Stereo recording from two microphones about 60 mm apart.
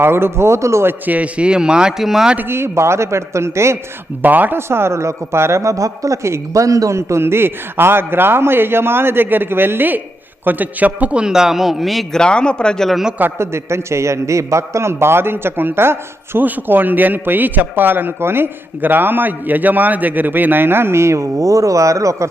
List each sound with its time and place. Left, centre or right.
0.0 s speech: right
1.0 s a man's voice: right; by 2.3 s centre
2.5 s speech: right
4.2 s speech: right
4.5 s a man's voice: right; by 12.2 s centre
12.2 s speech: centre
13.4 s speech: right
16.5 s a man's voice: right